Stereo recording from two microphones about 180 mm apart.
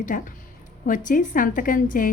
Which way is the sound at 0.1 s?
50° left (ahead or behind).